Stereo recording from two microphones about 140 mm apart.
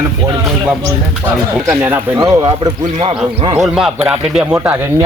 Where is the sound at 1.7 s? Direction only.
15° right (ahead or behind).